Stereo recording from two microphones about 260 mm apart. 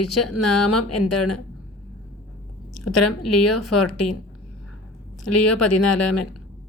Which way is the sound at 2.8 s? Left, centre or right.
Left.